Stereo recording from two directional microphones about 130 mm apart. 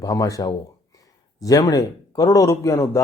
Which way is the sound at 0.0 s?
25° left (ahead or behind).